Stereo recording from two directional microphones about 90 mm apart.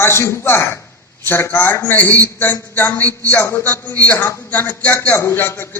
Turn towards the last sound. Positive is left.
turn(degrees=25)  # may be behind; listen again after turning